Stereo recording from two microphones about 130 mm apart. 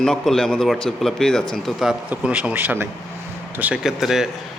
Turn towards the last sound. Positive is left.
turn(degrees=-5)  # may be behind; listen again after turning